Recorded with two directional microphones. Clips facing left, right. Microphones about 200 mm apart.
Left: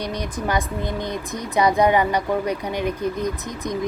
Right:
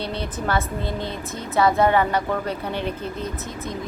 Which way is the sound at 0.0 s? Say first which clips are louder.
Left 1 dB; 15° left (ahead or behind).